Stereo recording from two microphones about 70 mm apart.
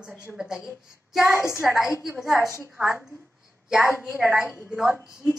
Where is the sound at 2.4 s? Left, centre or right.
Left.